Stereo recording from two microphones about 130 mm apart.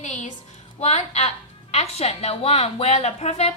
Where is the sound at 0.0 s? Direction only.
65° left (ahead or behind).